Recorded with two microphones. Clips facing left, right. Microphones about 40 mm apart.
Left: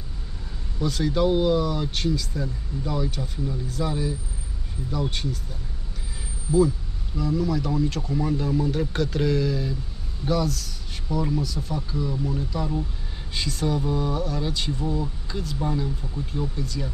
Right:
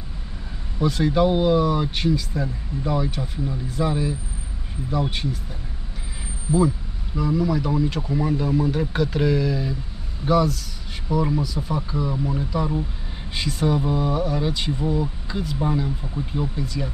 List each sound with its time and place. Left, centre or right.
0.7 s speech: right
6.5 s speech: centre